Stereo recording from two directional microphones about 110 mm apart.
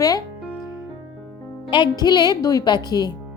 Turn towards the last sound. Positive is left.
turn(degrees=40)  # may be behind; listen again after turning